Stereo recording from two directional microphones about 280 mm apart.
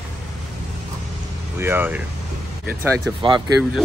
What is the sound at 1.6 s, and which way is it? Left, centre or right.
Speech, centre.